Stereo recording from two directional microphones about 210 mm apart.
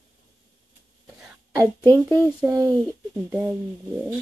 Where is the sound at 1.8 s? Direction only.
20° right (ahead or behind).